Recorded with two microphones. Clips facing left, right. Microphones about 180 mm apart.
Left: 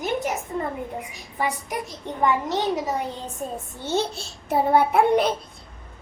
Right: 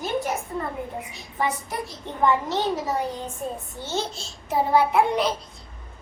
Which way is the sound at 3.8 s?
60° left (ahead or behind).